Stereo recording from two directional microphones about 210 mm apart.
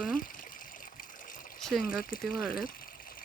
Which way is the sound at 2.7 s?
45° left (ahead or behind).